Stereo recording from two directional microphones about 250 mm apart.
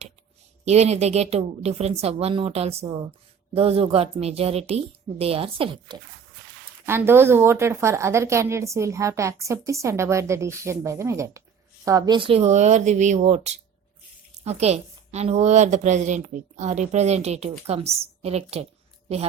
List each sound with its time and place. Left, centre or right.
0.6 s a woman's voice: right
6.8 s a woman's voice: centre; by 19.2 s right